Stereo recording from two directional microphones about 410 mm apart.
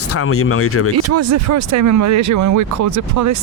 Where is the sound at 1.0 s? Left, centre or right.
Right.